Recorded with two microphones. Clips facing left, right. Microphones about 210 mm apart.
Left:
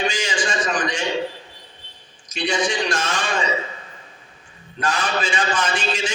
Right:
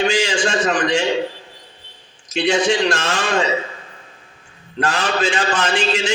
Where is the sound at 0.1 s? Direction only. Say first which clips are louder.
Right 6 dB; 70° right (ahead or behind).